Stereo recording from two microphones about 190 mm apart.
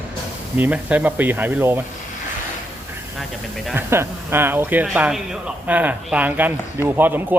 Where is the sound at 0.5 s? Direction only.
10° right (ahead or behind).